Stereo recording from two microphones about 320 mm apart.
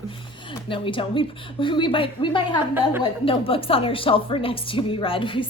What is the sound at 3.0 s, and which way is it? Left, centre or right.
A woman's voice, centre.